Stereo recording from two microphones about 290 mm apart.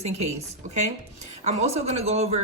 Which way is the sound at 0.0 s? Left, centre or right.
Right.